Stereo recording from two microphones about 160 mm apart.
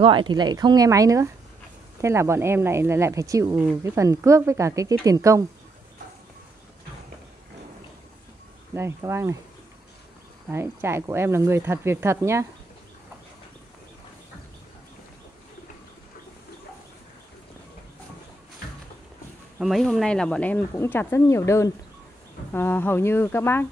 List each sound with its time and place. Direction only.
0.0 s a woman's voice: 30° right (ahead or behind)
8.7 s a woman's voice: 15° right (ahead or behind)
10.5 s a woman's voice: 15° right (ahead or behind)
19.6 s speech: centre (ahead or behind)